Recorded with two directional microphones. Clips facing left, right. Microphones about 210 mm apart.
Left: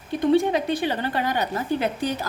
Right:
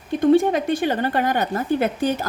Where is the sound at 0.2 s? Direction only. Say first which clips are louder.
Right 3 dB; 45° right (ahead or behind).